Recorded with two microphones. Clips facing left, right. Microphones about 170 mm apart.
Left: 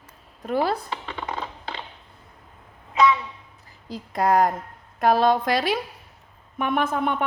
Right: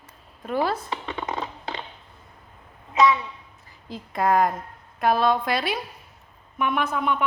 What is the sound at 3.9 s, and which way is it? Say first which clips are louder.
A woman's voice: left 1 dB; 40° left (ahead or behind).